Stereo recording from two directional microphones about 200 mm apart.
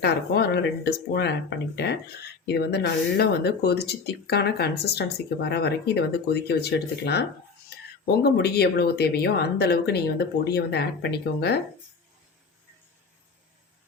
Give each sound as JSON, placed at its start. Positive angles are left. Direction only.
{"t": 0.0, "sound": "speech", "side_deg": 55}